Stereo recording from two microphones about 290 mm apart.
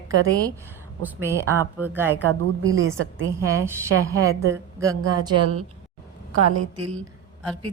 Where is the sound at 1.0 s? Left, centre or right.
Centre.